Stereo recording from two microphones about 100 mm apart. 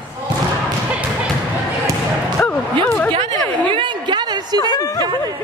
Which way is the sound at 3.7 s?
55° right (ahead or behind).